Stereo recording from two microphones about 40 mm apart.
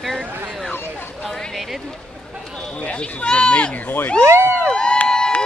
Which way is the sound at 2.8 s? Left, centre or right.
Left.